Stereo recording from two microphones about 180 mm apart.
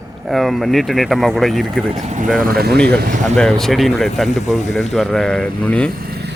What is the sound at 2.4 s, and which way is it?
Speech, 60° right (ahead or behind).